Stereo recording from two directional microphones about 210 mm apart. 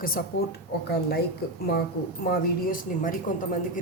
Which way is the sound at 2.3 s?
40° left (ahead or behind).